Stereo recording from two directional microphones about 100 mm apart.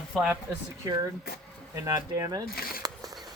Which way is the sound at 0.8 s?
40° right (ahead or behind).